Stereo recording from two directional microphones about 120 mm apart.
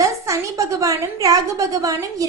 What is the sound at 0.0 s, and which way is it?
A woman's voice, 25° right (ahead or behind).